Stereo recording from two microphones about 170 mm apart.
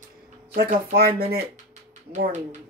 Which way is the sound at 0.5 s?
60° right (ahead or behind).